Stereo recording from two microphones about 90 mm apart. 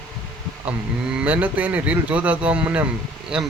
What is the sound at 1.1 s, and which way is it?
Speech, 15° right (ahead or behind).